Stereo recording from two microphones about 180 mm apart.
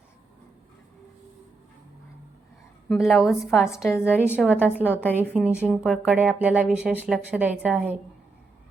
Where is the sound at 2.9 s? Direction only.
Centre (ahead or behind).